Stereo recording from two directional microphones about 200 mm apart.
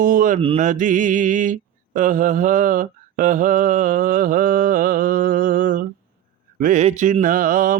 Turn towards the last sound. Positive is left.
turn(degrees=-45)  # may be behind; listen again after turning